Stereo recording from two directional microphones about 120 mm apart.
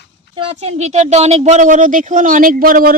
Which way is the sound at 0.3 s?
55° right (ahead or behind).